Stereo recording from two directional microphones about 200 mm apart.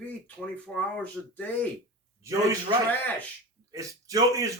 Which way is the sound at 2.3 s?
15° right (ahead or behind).